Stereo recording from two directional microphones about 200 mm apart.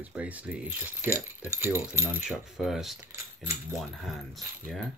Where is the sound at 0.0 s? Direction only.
5° right (ahead or behind).